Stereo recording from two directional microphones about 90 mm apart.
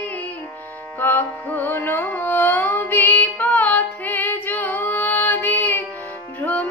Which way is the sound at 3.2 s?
15° left (ahead or behind).